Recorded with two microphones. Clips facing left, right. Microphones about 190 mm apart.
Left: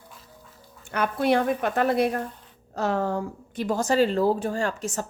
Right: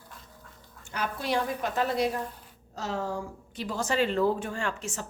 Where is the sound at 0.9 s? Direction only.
60° left (ahead or behind).